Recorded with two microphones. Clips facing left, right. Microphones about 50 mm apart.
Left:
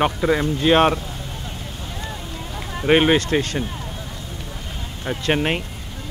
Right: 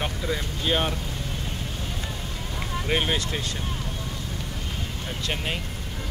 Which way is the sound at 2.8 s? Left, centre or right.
Left.